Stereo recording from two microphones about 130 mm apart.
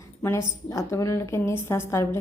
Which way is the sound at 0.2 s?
20° left (ahead or behind).